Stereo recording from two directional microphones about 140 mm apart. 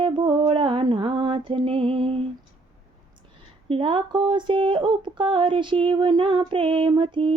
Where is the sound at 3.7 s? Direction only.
40° right (ahead or behind).